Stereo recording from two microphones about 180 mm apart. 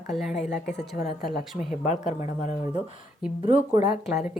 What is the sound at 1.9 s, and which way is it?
Speech, 40° left (ahead or behind).